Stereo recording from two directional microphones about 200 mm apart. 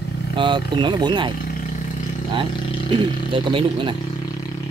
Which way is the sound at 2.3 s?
25° right (ahead or behind).